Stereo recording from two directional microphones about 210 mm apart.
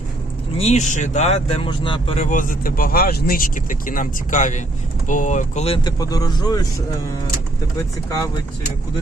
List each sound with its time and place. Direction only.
0.6 s speech: 30° left (ahead or behind)
2.2 s speech: 40° left (ahead or behind); by 6.6 s 20° left (ahead or behind)